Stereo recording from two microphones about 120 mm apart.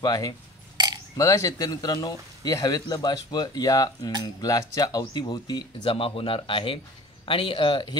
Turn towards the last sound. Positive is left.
turn(degrees=45)  # may be behind; listen again after turning